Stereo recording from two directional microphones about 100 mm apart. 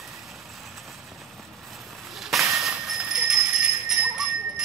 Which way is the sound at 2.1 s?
Centre (ahead or behind).